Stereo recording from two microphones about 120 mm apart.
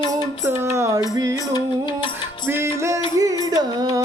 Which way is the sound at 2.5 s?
20° right (ahead or behind).